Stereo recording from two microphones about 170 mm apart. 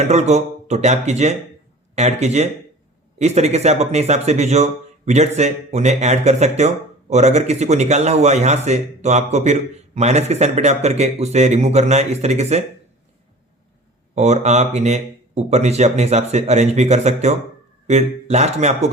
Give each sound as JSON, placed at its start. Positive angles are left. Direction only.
{"t": 0.0, "sound": "speech", "side_deg": -40}
{"t": 14.2, "sound": "speech", "side_deg": -40}